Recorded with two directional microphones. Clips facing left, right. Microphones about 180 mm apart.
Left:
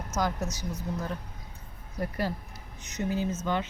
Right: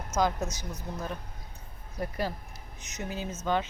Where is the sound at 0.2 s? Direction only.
15° right (ahead or behind).